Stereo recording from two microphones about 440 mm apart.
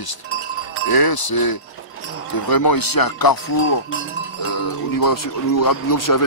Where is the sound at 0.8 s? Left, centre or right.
Left.